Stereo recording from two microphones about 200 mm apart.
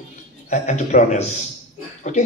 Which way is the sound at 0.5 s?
35° left (ahead or behind).